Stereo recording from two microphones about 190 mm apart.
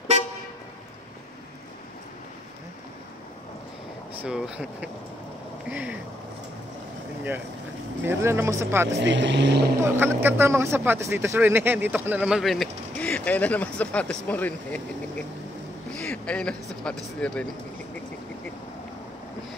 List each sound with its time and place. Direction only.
4.2 s speech: 5° right (ahead or behind)
8.0 s speech: 10° right (ahead or behind)
9.0 s speech: 70° right (ahead or behind)
9.8 s speech: 10° right (ahead or behind); by 17.5 s 5° left (ahead or behind)